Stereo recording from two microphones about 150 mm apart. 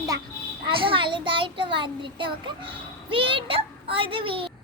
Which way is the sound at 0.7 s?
35° right (ahead or behind).